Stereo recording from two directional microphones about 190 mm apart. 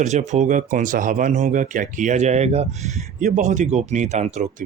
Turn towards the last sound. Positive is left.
turn(degrees=-40)  # may be behind; listen again after turning